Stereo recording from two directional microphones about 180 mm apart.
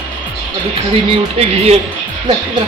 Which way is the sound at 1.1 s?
30° right (ahead or behind).